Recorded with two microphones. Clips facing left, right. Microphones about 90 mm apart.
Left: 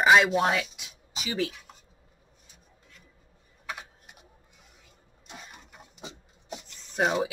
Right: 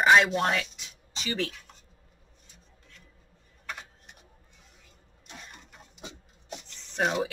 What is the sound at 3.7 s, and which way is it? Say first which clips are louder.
Typing: left 2 dB; 5° left (ahead or behind).